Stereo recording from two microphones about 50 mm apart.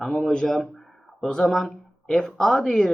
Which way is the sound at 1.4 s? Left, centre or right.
Centre.